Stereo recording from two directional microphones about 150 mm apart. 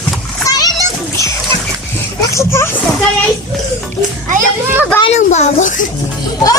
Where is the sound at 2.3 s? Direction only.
15° left (ahead or behind).